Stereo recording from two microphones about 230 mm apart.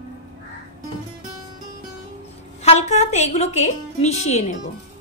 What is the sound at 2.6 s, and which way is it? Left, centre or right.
A woman's voice, left.